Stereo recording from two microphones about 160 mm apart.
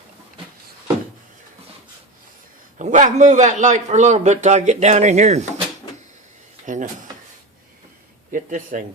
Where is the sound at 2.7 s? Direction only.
50° right (ahead or behind).